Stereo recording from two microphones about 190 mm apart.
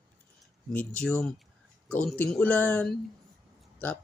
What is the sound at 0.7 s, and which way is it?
Speech, 5° left (ahead or behind).